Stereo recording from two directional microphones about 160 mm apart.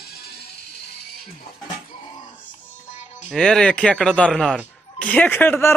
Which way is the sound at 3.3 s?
5° left (ahead or behind).